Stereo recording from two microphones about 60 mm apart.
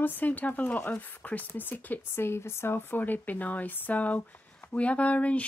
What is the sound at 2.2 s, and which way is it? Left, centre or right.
Speech, left.